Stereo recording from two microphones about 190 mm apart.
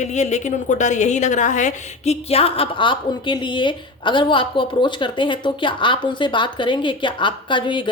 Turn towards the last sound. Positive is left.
turn(degrees=25)  # may be behind; listen again after turning